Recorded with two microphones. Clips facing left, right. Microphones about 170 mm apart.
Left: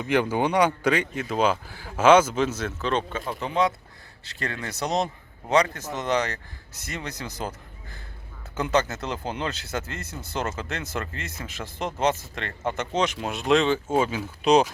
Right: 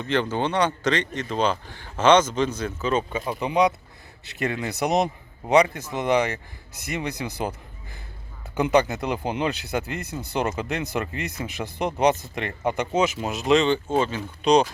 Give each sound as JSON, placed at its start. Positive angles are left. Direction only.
{"t": 0.0, "sound": "speech", "side_deg": 10}
{"t": 8.5, "sound": "speech", "side_deg": -15}